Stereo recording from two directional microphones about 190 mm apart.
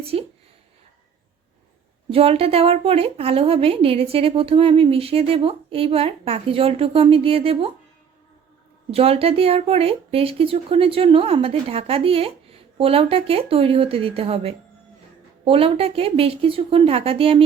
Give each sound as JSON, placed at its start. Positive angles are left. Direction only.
{"t": 0.0, "sound": "speech", "side_deg": -30}
{"t": 2.0, "sound": "a woman's voice", "side_deg": -30}
{"t": 8.9, "sound": "a woman's voice", "side_deg": -30}